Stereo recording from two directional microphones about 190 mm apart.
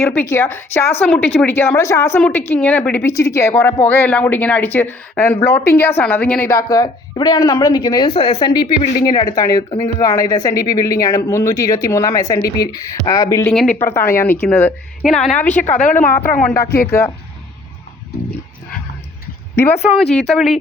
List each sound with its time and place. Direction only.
0.0 s a woman's voice: 10° left (ahead or behind)
13.5 s speech: 5° left (ahead or behind)
15.7 s a woman's voice: 45° left (ahead or behind)
16.4 s speech: 5° left (ahead or behind)
16.6 s speech: 55° left (ahead or behind)
20.0 s speech: centre (ahead or behind)